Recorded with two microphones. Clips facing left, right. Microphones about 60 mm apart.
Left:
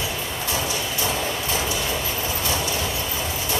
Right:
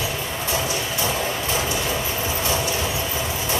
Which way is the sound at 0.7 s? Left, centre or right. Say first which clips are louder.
Right 1 dB; right.